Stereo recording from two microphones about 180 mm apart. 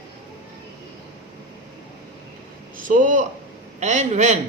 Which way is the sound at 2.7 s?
50° right (ahead or behind).